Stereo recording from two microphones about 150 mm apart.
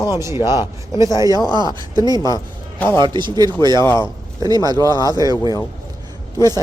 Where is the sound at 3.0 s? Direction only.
30° right (ahead or behind).